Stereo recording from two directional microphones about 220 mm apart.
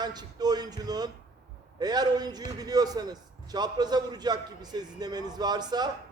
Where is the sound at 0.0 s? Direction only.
20° right (ahead or behind).